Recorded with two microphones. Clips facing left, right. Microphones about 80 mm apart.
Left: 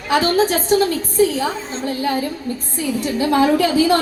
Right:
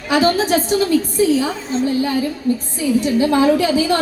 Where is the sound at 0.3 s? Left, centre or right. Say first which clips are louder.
Left 1 dB; left.